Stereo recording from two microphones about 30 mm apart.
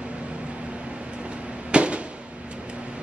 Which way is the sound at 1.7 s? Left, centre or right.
Right.